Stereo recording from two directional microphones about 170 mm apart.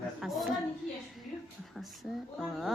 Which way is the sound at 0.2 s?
Centre (ahead or behind).